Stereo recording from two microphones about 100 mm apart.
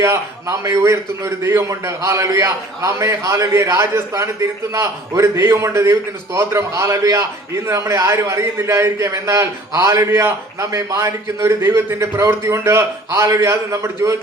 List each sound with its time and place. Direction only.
0.0 s a man's voice: 30° right (ahead or behind)